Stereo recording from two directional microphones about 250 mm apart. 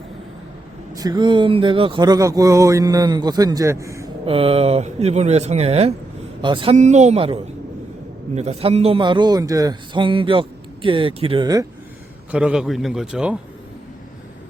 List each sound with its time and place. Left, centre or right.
0.9 s speech: centre
4.3 s a man's voice: right
12.3 s a man's voice: centre